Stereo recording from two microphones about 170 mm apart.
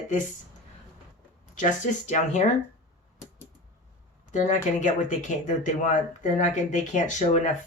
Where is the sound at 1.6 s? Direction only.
45° left (ahead or behind).